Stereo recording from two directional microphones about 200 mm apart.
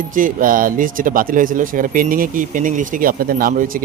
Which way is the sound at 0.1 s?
40° right (ahead or behind).